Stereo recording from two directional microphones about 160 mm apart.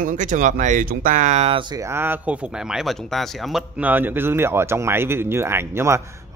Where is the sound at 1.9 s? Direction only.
15° right (ahead or behind).